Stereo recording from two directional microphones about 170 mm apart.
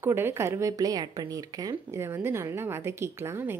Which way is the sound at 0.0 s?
15° right (ahead or behind).